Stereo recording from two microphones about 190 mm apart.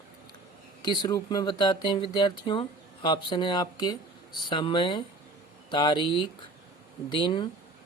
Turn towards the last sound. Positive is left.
turn(degrees=25)  # may be behind; listen again after turning